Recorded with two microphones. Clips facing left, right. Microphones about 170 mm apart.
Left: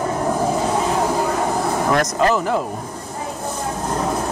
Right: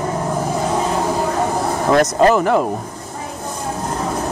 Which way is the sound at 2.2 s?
60° right (ahead or behind).